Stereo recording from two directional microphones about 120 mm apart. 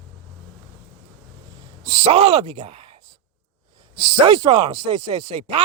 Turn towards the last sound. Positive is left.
turn(degrees=-50)  # may be behind; listen again after turning